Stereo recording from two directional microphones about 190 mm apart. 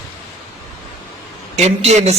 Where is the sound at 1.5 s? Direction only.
35° right (ahead or behind).